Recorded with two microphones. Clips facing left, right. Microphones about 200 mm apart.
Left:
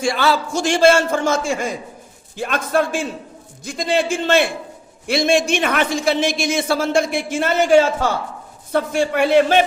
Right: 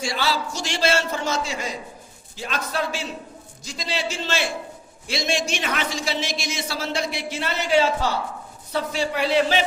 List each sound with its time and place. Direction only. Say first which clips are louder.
0.0 s a man's voice: left 7 dB; 55° left (ahead or behind)